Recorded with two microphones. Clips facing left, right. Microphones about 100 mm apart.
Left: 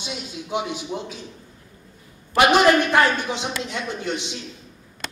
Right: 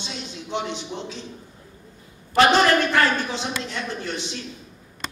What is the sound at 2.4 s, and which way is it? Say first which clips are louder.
A man's voice: left 1 dB; 15° left (ahead or behind).